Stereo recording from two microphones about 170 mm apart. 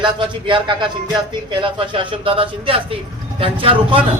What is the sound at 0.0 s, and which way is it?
A man's voice, 30° right (ahead or behind).